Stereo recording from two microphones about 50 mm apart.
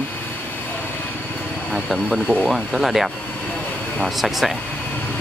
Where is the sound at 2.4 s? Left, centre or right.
Centre.